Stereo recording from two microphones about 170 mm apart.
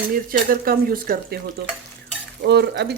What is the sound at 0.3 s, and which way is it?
Speech, 60° right (ahead or behind).